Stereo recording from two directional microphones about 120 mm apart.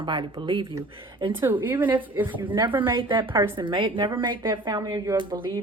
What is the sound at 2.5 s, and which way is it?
Speech, 45° right (ahead or behind).